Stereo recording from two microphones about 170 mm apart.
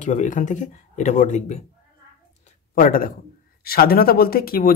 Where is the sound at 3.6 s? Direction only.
60° left (ahead or behind).